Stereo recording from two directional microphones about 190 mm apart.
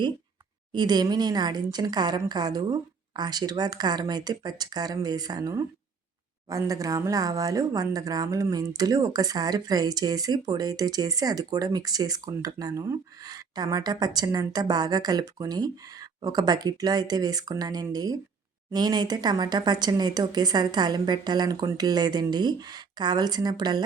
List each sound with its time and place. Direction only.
0.7 s speech: 20° right (ahead or behind)